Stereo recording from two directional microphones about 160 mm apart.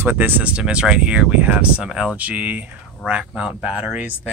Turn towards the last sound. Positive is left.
turn(degrees=-10)  # may be behind; listen again after turning